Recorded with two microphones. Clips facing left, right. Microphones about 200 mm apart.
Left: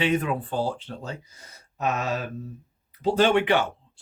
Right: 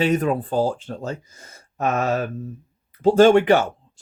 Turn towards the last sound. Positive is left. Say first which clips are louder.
# right 7 dB
turn(degrees=-45)  # may be behind; listen again after turning